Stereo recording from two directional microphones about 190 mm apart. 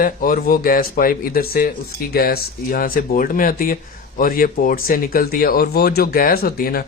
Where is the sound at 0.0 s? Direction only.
45° left (ahead or behind).